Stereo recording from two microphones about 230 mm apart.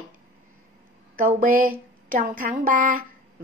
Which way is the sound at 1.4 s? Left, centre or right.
Right.